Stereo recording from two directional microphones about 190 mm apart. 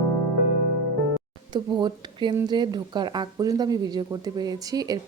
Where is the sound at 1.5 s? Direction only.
25° right (ahead or behind).